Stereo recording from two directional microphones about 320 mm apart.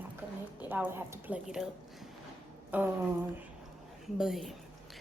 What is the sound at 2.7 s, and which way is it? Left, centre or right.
Speech, centre.